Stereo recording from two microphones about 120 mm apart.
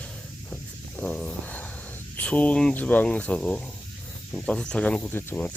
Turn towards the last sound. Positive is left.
turn(degrees=15)  # may be behind; listen again after turning